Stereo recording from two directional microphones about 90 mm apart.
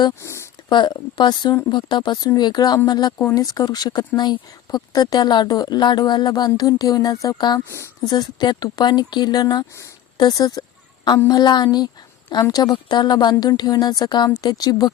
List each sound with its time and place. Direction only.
0.2 s a sound: 30° left (ahead or behind)
0.7 s a woman's voice: 55° left (ahead or behind)
12.7 s a woman's voice: 55° left (ahead or behind)